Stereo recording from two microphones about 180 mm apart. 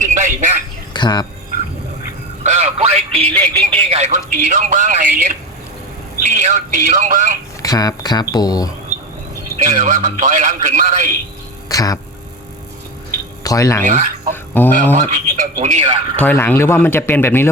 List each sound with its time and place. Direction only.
0.0 s a sound: 40° right (ahead or behind)
0.9 s speech: 25° left (ahead or behind)
2.4 s a man's voice: 40° right (ahead or behind)
7.6 s speech: 20° left (ahead or behind)
9.6 s a man's voice: 45° right (ahead or behind)
11.7 s speech: 20° left (ahead or behind)
13.4 s speech: 20° left (ahead or behind)
13.8 s a man's voice: 45° right (ahead or behind)
14.5 s speech: 10° left (ahead or behind)
15.1 s speech: 40° right (ahead or behind)
16.1 s speech: 10° left (ahead or behind)